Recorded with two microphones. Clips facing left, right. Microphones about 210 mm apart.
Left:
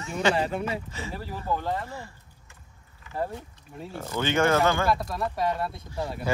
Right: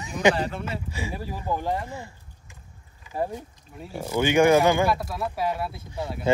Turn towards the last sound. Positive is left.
turn(degrees=0)  # may be behind; listen again after turning